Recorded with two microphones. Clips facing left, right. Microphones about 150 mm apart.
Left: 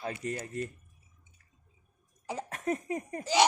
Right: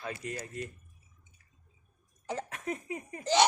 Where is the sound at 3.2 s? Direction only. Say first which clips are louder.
Even; 10° left (ahead or behind).